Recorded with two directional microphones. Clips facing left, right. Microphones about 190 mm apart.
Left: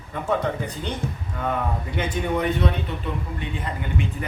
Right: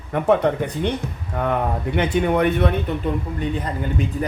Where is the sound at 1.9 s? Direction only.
65° right (ahead or behind).